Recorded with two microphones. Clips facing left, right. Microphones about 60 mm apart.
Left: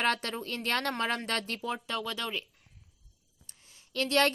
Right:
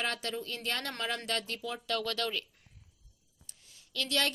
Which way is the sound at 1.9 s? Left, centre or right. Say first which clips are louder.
Right 1 dB; centre.